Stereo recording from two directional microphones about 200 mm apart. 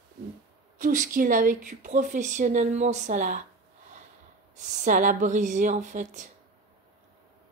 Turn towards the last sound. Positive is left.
turn(degrees=-40)  # may be behind; listen again after turning